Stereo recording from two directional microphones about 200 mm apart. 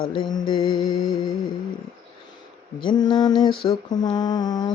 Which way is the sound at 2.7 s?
20° left (ahead or behind).